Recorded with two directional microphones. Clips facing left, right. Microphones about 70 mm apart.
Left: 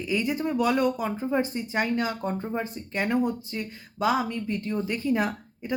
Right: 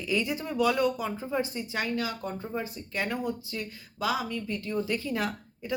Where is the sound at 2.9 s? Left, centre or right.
Left.